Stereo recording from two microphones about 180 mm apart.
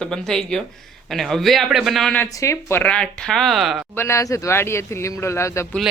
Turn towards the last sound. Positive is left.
turn(degrees=15)  # may be behind; listen again after turning